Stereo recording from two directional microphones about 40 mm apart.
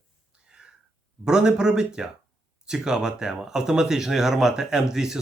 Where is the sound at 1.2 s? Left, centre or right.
Centre.